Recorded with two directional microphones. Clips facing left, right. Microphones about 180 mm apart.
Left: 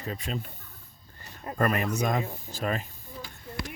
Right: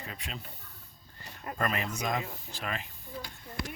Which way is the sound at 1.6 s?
45° left (ahead or behind).